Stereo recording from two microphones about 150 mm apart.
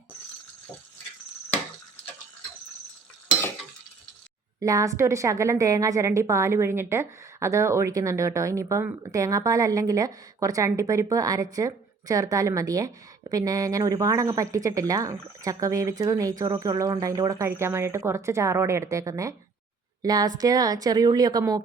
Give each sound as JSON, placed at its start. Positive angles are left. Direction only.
{"t": 4.6, "sound": "a woman's voice", "side_deg": -20}